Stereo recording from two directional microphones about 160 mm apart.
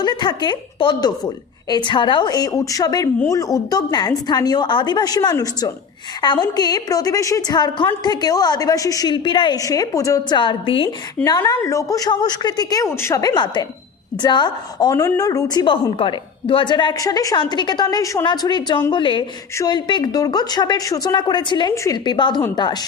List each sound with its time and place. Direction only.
0.0 s a woman's voice: 25° left (ahead or behind)